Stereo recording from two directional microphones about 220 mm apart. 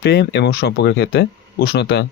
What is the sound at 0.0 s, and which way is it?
Speech, 50° left (ahead or behind).